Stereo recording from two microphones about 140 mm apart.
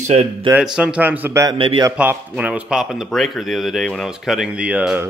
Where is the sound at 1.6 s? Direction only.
40° right (ahead or behind).